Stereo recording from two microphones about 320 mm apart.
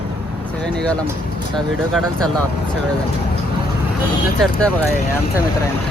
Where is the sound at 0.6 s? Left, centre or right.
Centre.